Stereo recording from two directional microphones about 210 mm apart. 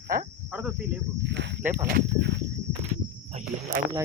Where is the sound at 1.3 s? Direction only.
55° right (ahead or behind).